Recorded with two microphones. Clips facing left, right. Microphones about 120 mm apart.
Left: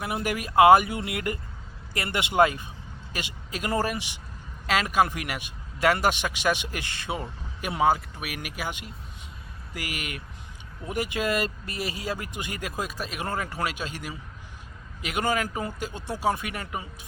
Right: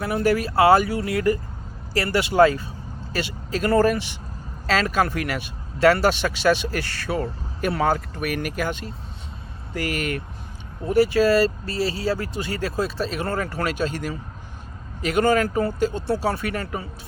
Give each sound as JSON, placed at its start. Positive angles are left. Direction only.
{"t": 0.0, "sound": "speech", "side_deg": 15}